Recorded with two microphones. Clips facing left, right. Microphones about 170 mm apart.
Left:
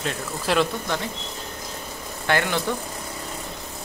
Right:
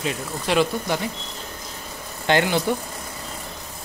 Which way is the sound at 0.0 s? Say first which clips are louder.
Right 1 dB; 5° right (ahead or behind).